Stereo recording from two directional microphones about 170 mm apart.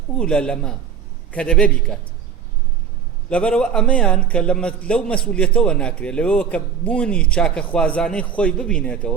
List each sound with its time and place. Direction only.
0.2 s a man's voice: 5° left (ahead or behind)
3.2 s a man's voice: 5° left (ahead or behind)